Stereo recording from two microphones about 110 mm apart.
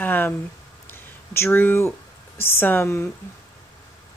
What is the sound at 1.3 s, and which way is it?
A woman's voice, 20° left (ahead or behind).